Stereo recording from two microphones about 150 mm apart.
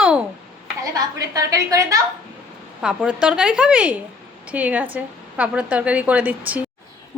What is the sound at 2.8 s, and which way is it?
A woman's voice, 5° right (ahead or behind).